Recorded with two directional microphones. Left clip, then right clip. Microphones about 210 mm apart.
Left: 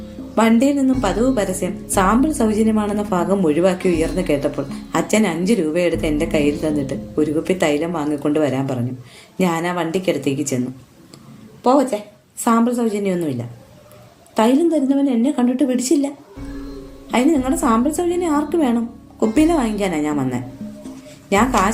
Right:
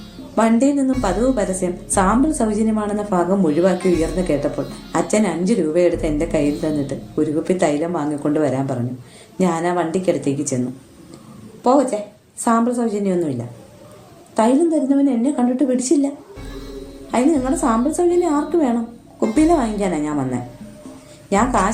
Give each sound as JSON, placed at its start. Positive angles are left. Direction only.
{"t": 0.3, "sound": "a woman's voice", "side_deg": 50}
{"t": 11.6, "sound": "a woman's voice", "side_deg": 50}
{"t": 14.3, "sound": "a woman's voice", "side_deg": 50}
{"t": 17.1, "sound": "a woman's voice", "side_deg": 50}
{"t": 21.2, "sound": "speech", "side_deg": 50}